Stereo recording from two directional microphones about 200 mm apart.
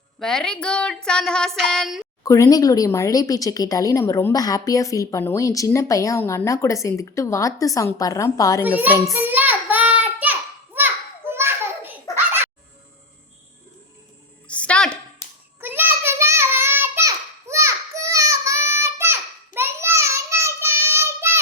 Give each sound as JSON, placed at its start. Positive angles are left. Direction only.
{"t": 0.2, "sound": "female singing", "side_deg": 5}
{"t": 2.2, "sound": "speech", "side_deg": 15}
{"t": 8.8, "sound": "child singing", "side_deg": -10}
{"t": 10.8, "sound": "a sound", "side_deg": -10}
{"t": 14.4, "sound": "a sound", "side_deg": 5}
{"t": 15.6, "sound": "child singing", "side_deg": -10}